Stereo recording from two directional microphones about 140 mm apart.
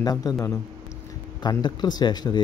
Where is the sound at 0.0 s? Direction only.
25° left (ahead or behind).